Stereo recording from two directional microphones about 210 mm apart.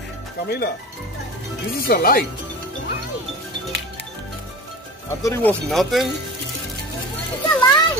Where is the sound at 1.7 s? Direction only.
45° left (ahead or behind).